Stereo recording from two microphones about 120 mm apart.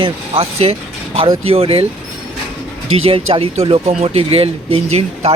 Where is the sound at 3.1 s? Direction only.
55° right (ahead or behind).